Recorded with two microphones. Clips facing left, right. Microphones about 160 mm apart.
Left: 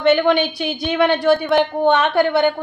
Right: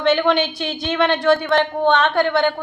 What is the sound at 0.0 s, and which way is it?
A woman's voice, 5° left (ahead or behind).